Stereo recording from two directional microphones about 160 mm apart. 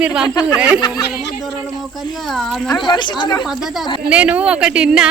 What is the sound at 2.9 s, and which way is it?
Speech, 30° left (ahead or behind).